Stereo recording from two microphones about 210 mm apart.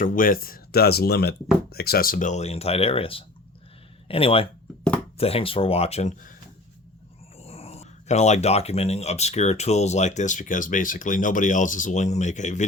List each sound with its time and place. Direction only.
0.0 s speech: 40° left (ahead or behind)
7.3 s speech: 30° left (ahead or behind)